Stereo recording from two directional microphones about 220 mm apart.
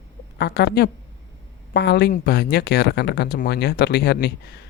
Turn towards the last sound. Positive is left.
turn(degrees=50)  # may be behind; listen again after turning